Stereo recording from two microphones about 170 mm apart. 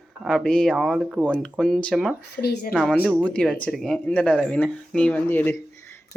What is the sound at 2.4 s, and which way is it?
Speech, 70° left (ahead or behind).